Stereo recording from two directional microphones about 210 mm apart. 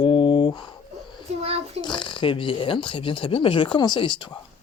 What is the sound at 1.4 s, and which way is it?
Speech, 30° right (ahead or behind).